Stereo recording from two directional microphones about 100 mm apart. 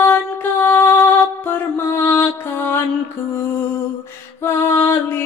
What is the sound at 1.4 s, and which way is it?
Mantra, 25° left (ahead or behind).